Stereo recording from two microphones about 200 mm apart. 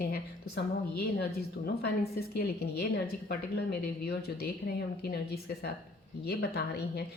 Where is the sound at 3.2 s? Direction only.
50° left (ahead or behind).